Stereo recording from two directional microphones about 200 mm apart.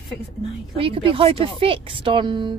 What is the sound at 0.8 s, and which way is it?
Speech, 25° right (ahead or behind).